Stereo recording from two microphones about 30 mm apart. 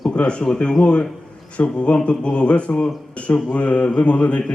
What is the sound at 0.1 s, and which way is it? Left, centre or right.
Speech, left.